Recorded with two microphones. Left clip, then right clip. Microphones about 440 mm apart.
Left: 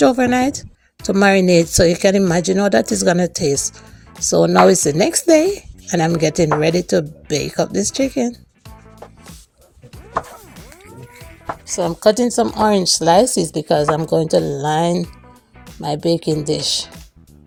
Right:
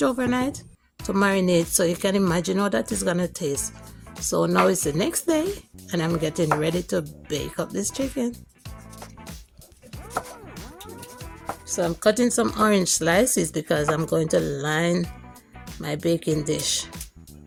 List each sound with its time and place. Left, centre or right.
0.0 s speech: right
11.7 s speech: right